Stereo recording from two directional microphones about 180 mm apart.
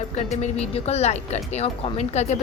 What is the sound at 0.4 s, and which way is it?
A woman's voice, 35° left (ahead or behind).